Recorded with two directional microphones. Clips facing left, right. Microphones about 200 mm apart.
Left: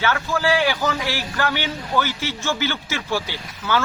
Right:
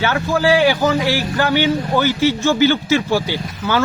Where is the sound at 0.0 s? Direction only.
30° right (ahead or behind).